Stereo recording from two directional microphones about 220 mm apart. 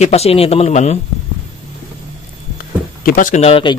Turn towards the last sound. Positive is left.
turn(degrees=25)  # may be behind; listen again after turning